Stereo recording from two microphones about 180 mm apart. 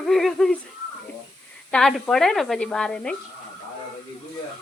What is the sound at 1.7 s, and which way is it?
A woman's voice, centre (ahead or behind).